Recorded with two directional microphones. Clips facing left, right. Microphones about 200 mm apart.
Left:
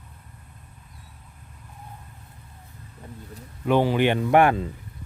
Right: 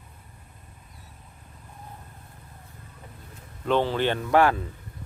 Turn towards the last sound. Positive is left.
turn(degrees=20)  # may be behind; listen again after turning